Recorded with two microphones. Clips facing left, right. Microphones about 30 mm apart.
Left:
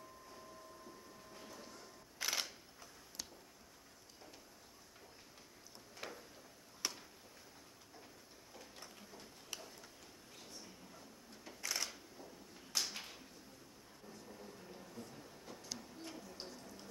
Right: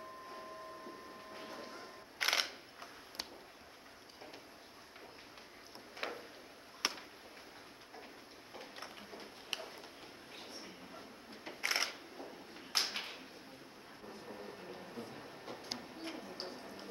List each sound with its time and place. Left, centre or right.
0.3 s train: right
5.9 s a sound: right
8.5 s tick-tock: right
10.4 s camera: right
14.0 s train: right